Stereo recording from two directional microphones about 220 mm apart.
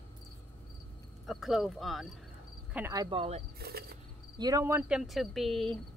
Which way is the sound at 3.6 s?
45° right (ahead or behind).